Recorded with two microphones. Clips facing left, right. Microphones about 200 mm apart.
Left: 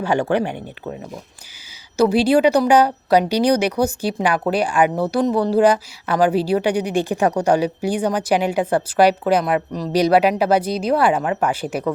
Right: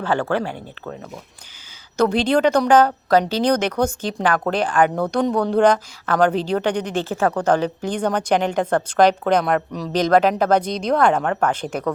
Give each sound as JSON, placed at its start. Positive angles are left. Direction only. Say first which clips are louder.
{"t": 0.0, "sound": "a woman's voice", "louder": "left 2 dB", "side_deg": 15}